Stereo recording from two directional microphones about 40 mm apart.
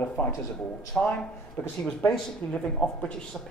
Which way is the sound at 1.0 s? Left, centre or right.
Centre.